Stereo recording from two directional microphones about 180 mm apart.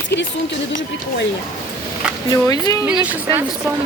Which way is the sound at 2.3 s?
20° left (ahead or behind).